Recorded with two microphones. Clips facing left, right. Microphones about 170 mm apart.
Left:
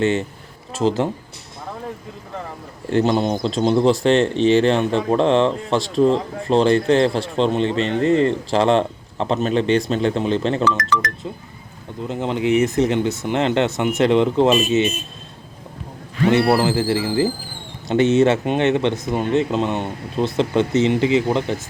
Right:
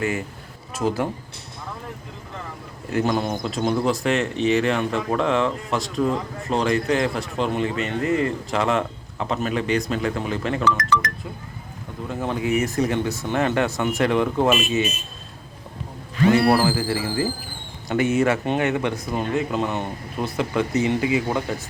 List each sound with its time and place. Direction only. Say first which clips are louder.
0.0 s speech: left 6 dB; 25° left (ahead or behind)
2.9 s speech: left 5 dB; 25° left (ahead or behind)
12.0 s speech: left 4 dB; 20° left (ahead or behind)
16.3 s speech: left 2 dB; 20° left (ahead or behind)